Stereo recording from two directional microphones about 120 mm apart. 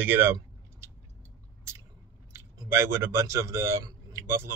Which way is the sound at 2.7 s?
20° right (ahead or behind).